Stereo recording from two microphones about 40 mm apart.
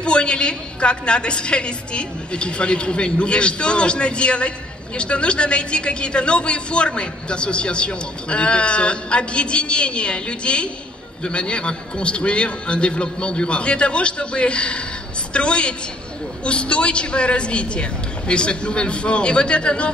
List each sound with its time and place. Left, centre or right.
0.0 s a woman's voice: left